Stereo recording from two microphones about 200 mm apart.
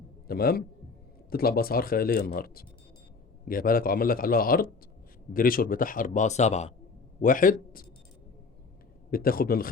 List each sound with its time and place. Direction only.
0.3 s speech: 50° left (ahead or behind)
9.0 s speech: 45° left (ahead or behind)